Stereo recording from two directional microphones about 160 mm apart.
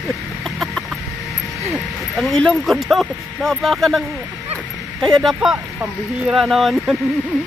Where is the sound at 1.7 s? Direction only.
Centre (ahead or behind).